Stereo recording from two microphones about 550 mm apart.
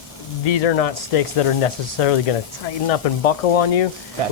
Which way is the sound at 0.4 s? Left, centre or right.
Left.